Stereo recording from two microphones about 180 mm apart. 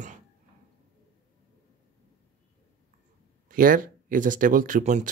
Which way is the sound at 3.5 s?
50° right (ahead or behind).